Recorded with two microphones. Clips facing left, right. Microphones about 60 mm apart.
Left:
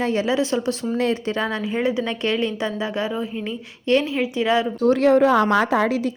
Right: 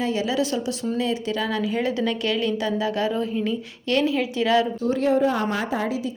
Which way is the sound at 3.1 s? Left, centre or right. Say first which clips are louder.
Right 2 dB; centre.